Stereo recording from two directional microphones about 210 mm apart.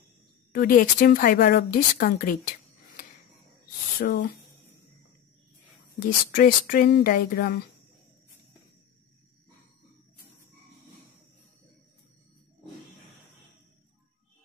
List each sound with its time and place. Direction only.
0.5 s a woman's voice: 45° left (ahead or behind)
4.0 s a woman's voice: 50° left (ahead or behind)
5.9 s a woman's voice: 45° left (ahead or behind)